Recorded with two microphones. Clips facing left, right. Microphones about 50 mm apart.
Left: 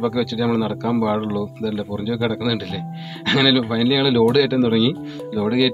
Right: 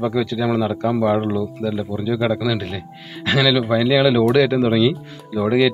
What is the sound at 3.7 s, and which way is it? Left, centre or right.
Speech, centre.